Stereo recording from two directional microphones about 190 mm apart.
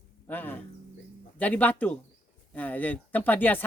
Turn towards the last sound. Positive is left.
turn(degrees=10)  # may be behind; listen again after turning